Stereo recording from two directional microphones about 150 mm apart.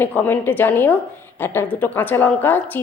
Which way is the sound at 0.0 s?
15° left (ahead or behind).